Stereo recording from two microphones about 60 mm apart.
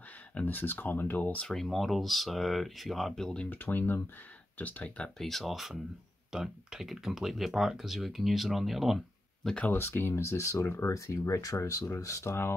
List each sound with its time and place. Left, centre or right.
0.3 s speech: left
1.5 s speech: centre
3.4 s speech: left
5.2 s speech: centre
9.8 s speech: left